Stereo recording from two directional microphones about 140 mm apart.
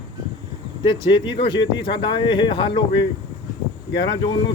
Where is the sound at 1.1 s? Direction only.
35° left (ahead or behind).